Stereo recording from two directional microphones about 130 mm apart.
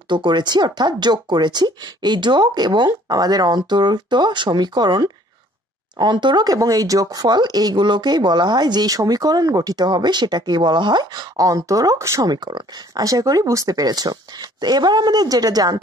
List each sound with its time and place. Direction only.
0.1 s speech: 35° right (ahead or behind)